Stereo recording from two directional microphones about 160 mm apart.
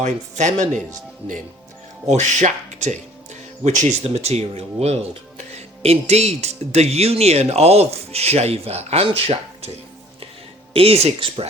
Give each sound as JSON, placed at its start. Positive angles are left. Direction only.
{"t": 0.0, "sound": "speech", "side_deg": -50}
{"t": 2.0, "sound": "speech", "side_deg": -45}
{"t": 10.8, "sound": "speech", "side_deg": -40}